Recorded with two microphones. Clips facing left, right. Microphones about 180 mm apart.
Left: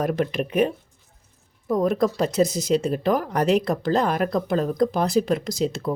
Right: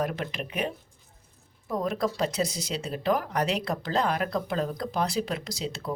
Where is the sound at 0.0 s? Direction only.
45° left (ahead or behind).